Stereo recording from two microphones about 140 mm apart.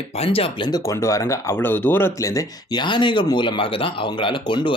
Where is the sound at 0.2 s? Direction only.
40° left (ahead or behind).